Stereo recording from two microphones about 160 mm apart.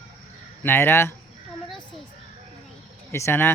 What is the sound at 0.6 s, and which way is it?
Speech, 15° left (ahead or behind).